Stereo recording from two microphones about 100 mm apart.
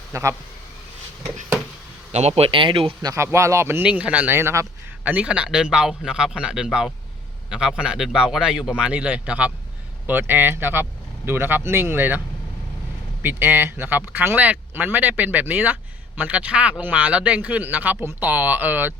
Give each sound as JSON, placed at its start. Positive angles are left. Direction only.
{"t": 0.1, "sound": "speech", "side_deg": -30}
{"t": 2.1, "sound": "speech", "side_deg": -90}
{"t": 3.3, "sound": "speech", "side_deg": -30}
{"t": 3.8, "sound": "speech", "side_deg": -15}
{"t": 5.0, "sound": "speech", "side_deg": -15}
{"t": 13.2, "sound": "speech", "side_deg": -20}